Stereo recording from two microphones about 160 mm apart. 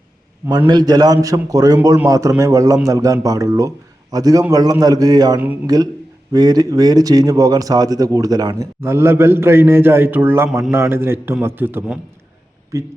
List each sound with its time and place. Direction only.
0.7 s a man's voice: 25° right (ahead or behind)